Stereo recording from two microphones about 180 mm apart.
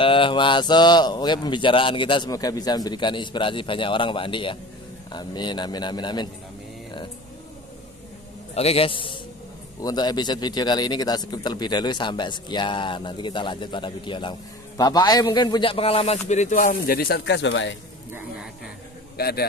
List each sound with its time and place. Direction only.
0.0 s speech: 30° left (ahead or behind)
8.5 s speech: 35° left (ahead or behind); by 17.7 s 90° left
19.1 s a man's voice: 60° left (ahead or behind)